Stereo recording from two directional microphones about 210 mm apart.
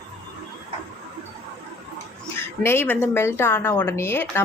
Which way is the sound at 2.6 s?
10° left (ahead or behind).